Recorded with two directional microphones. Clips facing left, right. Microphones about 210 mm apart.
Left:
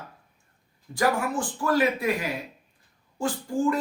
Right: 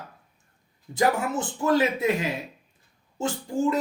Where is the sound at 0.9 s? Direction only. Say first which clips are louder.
Right 1 dB; 20° right (ahead or behind).